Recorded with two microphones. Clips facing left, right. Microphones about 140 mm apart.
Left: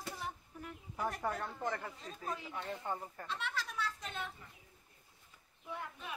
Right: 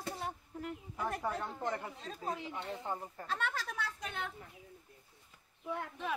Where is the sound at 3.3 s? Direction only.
50° right (ahead or behind).